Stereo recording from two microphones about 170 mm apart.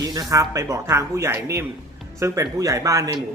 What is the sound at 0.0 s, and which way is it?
Speech, 20° right (ahead or behind).